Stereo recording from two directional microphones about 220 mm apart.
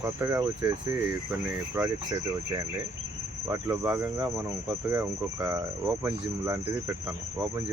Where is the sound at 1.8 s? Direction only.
15° right (ahead or behind).